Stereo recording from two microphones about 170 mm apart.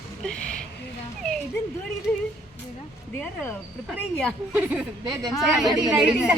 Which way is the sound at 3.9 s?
5° left (ahead or behind).